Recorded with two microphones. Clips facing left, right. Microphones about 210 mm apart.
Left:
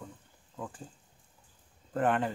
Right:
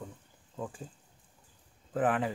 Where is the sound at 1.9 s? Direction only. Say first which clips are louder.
Even; 5° right (ahead or behind).